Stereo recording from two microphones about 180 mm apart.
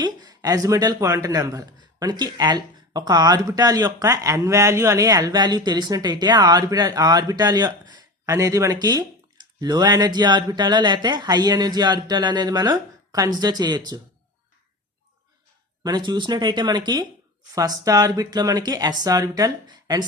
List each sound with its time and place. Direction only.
0.0 s speech: 20° right (ahead or behind)
15.8 s speech: 25° right (ahead or behind)